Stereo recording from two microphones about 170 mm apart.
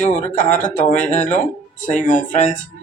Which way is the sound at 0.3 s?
50° left (ahead or behind).